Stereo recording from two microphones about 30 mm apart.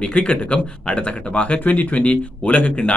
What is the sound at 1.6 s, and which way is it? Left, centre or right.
Speech, left.